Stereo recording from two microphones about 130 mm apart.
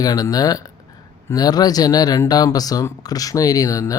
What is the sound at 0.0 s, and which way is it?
Speech, 30° left (ahead or behind).